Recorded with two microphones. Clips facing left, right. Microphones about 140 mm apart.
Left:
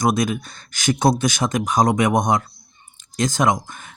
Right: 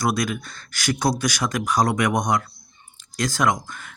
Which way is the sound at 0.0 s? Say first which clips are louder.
Left 4 dB; 20° left (ahead or behind).